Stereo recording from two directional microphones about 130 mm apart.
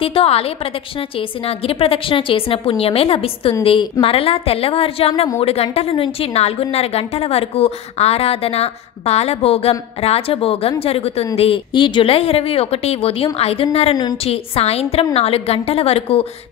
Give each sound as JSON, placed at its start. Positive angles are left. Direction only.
{"t": 0.0, "sound": "a woman's voice", "side_deg": 45}
{"t": 1.7, "sound": "a woman's voice", "side_deg": 45}